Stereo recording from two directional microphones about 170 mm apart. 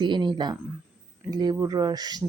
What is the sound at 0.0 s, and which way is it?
Speech, 25° right (ahead or behind).